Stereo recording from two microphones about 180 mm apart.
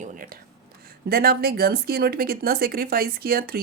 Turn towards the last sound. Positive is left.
turn(degrees=-55)  # may be behind; listen again after turning